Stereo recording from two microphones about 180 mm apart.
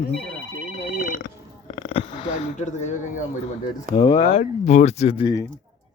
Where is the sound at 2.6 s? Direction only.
40° left (ahead or behind).